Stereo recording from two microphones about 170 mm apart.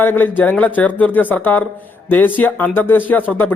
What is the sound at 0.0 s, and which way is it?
Speech, 10° left (ahead or behind).